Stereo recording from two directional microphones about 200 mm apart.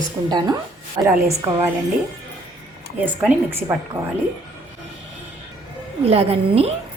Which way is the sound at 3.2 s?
10° right (ahead or behind).